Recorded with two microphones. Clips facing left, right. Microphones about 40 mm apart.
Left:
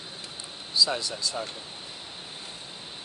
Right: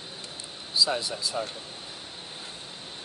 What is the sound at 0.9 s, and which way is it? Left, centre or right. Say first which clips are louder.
Speech: right 1 dB; centre.